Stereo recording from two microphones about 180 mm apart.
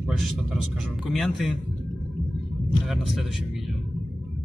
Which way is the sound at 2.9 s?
Centre (ahead or behind).